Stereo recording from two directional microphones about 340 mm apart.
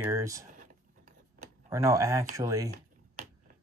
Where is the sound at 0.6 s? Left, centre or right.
Right.